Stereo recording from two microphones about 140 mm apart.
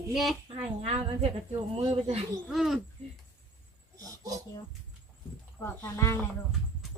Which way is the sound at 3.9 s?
25° right (ahead or behind).